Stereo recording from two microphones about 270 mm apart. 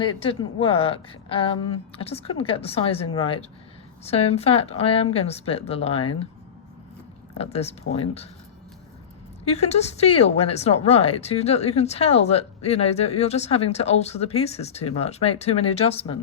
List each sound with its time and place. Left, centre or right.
0.0 s speech: centre
7.3 s speech: left
9.4 s speech: left